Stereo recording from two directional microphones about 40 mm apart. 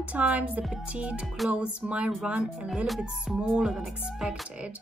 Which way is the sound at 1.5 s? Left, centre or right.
Right.